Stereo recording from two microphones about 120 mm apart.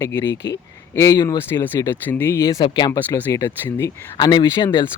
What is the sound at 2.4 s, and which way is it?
Speech, 35° left (ahead or behind).